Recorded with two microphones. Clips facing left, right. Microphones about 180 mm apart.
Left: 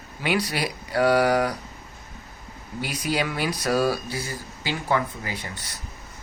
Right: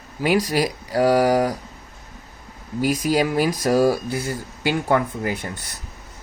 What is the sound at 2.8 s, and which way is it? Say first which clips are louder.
A man's voice: right 7 dB; 40° right (ahead or behind).